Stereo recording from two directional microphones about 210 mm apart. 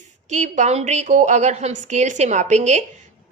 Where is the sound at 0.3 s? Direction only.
35° right (ahead or behind).